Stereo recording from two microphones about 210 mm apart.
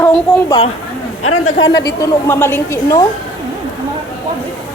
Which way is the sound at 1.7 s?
50° left (ahead or behind).